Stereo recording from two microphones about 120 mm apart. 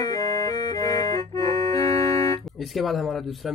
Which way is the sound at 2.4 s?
Centre (ahead or behind).